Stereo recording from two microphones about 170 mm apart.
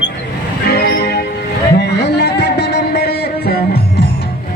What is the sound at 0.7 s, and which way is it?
Music, 70° left (ahead or behind).